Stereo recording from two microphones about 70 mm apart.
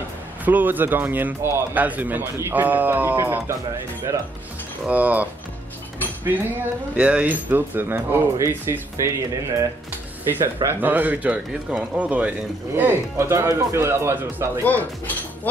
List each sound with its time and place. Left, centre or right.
0.5 s speech: right
4.1 s speech: right
4.8 s speech: right
8.4 s speech: right
10.3 s speech: right
13.2 s speech: right
14.6 s speech: left